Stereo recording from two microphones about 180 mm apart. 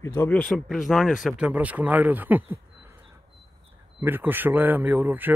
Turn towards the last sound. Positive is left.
turn(degrees=-10)  # may be behind; listen again after turning